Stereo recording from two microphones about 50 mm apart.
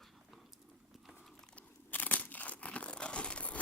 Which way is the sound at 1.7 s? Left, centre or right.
Left.